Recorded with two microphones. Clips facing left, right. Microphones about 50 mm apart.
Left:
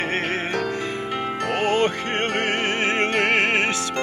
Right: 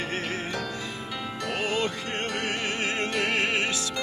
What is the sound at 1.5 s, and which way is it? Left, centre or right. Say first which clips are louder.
Music: left 7 dB; left.